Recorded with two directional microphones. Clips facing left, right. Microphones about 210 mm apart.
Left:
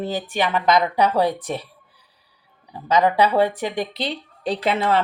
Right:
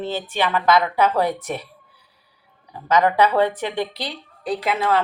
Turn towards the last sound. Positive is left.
turn(degrees=30)  # may be behind; listen again after turning